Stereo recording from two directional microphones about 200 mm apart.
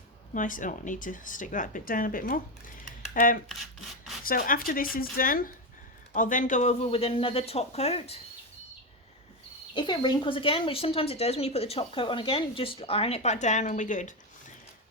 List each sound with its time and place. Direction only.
0.3 s speech: 40° left (ahead or behind)
9.7 s a woman's voice: 25° left (ahead or behind); by 14.1 s 40° left (ahead or behind)